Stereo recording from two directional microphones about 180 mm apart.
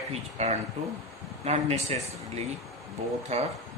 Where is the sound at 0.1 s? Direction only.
40° right (ahead or behind).